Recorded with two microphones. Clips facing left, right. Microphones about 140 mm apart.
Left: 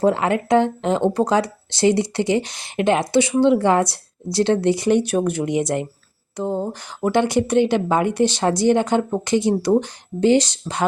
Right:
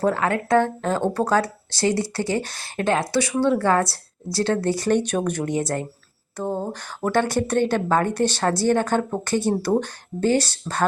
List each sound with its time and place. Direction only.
0.0 s speech: 20° left (ahead or behind)